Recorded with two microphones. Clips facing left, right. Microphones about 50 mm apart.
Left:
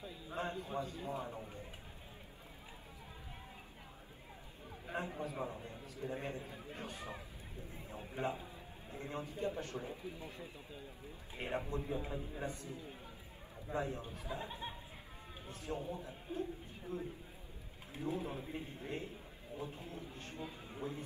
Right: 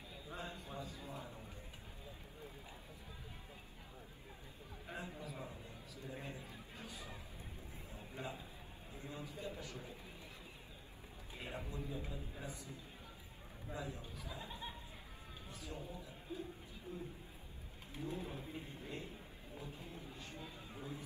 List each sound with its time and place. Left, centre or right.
0.3 s a man's voice: left
4.9 s a man's voice: left
5.6 s a sound: left
8.2 s a man's voice: left
11.3 s a man's voice: left
13.7 s a man's voice: left
19.6 s a man's voice: left